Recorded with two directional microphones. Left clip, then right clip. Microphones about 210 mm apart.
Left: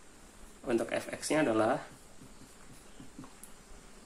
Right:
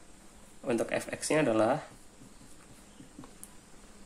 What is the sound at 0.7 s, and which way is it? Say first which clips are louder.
Speech: right 1 dB; 40° right (ahead or behind).